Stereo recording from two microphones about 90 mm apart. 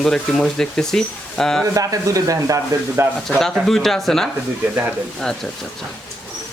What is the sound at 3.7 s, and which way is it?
Speech, 5° left (ahead or behind).